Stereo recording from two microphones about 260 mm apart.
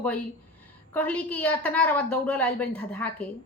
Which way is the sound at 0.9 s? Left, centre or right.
Centre.